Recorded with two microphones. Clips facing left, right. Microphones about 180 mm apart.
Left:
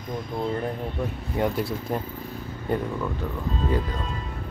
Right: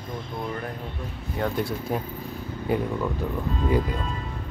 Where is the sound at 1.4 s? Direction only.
20° left (ahead or behind).